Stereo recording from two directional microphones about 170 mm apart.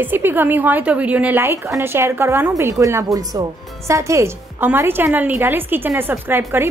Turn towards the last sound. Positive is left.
turn(degrees=-10)  # may be behind; listen again after turning